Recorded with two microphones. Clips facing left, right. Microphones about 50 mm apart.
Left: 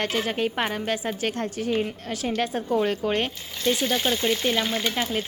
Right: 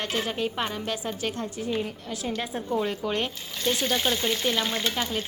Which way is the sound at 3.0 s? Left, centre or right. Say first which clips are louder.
Left 4 dB; left.